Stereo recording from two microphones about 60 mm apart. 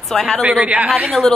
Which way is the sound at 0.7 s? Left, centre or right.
Right.